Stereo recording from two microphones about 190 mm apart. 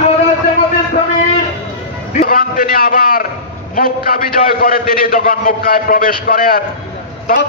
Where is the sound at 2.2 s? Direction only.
50° left (ahead or behind).